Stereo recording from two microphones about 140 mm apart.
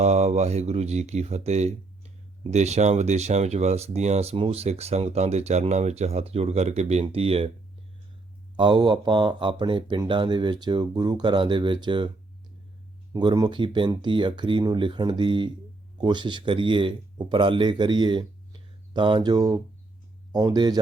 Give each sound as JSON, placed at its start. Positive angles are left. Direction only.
{"t": 0.0, "sound": "speech", "side_deg": -55}
{"t": 8.5, "sound": "speech", "side_deg": -35}
{"t": 13.1, "sound": "speech", "side_deg": -30}